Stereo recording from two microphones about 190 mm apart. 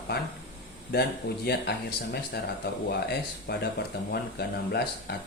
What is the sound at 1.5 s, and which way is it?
Speech, 60° left (ahead or behind).